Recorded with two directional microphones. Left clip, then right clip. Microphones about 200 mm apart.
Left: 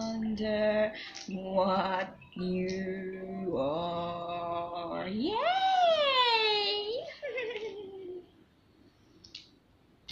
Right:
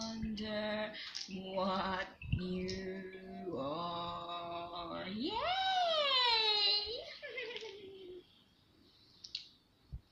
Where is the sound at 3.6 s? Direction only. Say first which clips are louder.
Left 8 dB; 15° right (ahead or behind).